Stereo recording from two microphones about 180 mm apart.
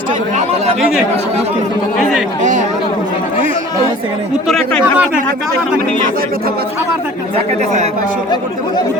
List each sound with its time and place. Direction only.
2.4 s speech: 45° right (ahead or behind)
4.4 s speech: centre (ahead or behind)
7.3 s speech: 40° right (ahead or behind)